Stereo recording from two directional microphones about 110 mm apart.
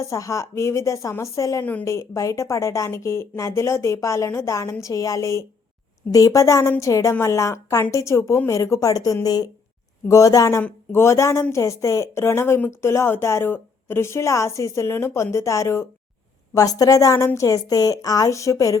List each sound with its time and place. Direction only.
0.0 s a woman's voice: 30° left (ahead or behind)